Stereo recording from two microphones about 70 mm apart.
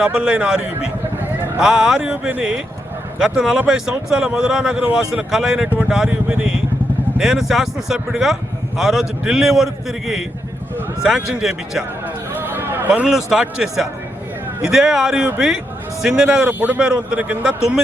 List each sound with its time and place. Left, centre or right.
0.0 s a man's voice: centre
11.0 s a man's voice: centre
12.5 s a sound: right
13.1 s a man's voice: centre